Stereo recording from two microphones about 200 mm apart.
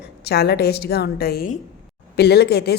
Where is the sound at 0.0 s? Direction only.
55° left (ahead or behind).